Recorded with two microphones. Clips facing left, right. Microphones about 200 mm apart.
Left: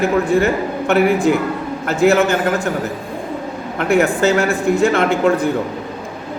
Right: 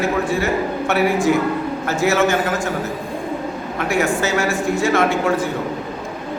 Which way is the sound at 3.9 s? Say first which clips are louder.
Left 5 dB; 60° left (ahead or behind).